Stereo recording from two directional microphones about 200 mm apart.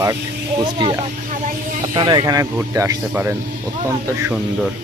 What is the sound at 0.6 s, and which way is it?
Speech, 25° right (ahead or behind).